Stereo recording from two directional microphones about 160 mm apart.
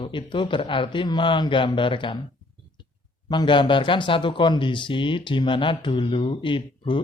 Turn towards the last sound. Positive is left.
turn(degrees=30)  # may be behind; listen again after turning